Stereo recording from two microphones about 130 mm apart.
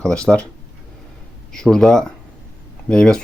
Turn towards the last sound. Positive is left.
turn(degrees=5)  # may be behind; listen again after turning